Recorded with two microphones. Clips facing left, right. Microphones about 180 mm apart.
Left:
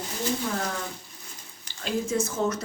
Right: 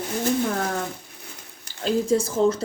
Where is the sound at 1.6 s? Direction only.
35° right (ahead or behind).